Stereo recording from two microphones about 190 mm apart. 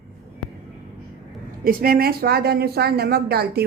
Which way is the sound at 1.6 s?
50° right (ahead or behind).